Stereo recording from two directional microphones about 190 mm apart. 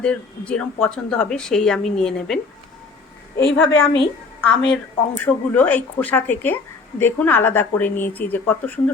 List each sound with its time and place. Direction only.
0.0 s speech: 5° left (ahead or behind)
3.4 s a woman's voice: 90° left
3.8 s a woman's voice: 30° left (ahead or behind)
4.4 s a woman's voice: 5° left (ahead or behind)